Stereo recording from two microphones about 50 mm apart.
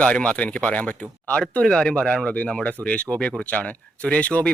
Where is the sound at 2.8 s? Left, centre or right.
Right.